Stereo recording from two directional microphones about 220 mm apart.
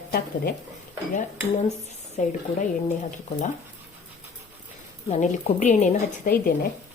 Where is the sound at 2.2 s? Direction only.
35° left (ahead or behind).